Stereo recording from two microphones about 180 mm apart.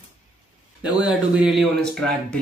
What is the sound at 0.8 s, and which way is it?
A man's voice, 5° right (ahead or behind).